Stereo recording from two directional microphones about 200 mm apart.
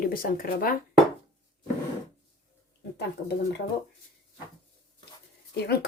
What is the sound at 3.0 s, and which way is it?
Speech, 55° left (ahead or behind).